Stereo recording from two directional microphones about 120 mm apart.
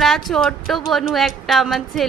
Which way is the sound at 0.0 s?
Centre (ahead or behind).